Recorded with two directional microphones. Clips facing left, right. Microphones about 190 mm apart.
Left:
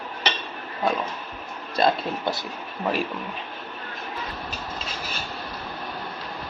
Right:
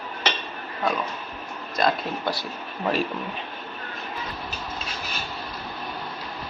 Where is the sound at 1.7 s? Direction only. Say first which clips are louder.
Left 2 dB; 25° left (ahead or behind).